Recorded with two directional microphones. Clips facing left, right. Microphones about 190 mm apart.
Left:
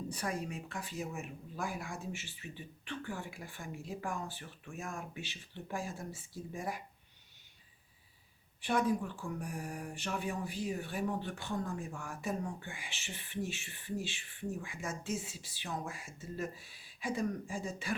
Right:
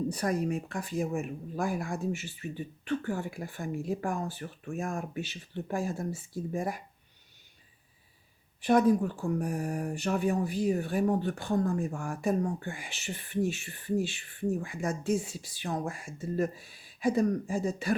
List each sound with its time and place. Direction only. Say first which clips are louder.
0.1 s speech: right 9 dB; 40° right (ahead or behind)
8.6 s speech: right 9 dB; 40° right (ahead or behind)
15.2 s speech: right 8 dB; 45° right (ahead or behind)